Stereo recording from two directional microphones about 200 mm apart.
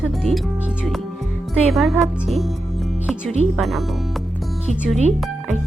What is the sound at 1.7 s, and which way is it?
Speech, centre (ahead or behind).